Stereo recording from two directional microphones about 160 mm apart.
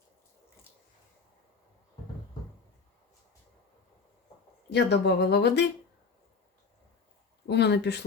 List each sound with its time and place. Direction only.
4.7 s speech: 90° left
7.4 s speech: 90° left